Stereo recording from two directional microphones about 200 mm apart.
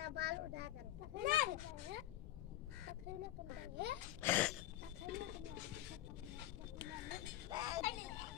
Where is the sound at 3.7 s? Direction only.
60° right (ahead or behind).